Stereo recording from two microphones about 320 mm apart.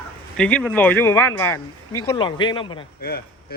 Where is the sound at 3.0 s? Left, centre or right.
Left.